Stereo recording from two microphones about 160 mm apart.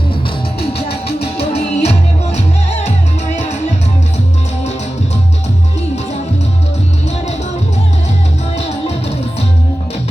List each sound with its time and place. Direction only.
1.4 s music: 40° left (ahead or behind)
8.5 s music: 40° left (ahead or behind)